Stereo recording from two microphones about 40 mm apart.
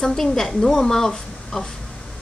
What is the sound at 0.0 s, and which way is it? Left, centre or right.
Speech, centre.